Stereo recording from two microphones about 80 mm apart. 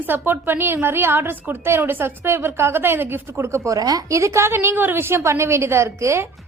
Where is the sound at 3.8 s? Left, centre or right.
Right.